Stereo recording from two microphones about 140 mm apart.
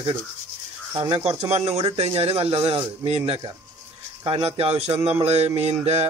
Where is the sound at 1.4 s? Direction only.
45° right (ahead or behind).